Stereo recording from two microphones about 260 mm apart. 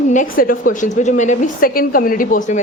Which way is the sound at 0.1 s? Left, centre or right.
Left.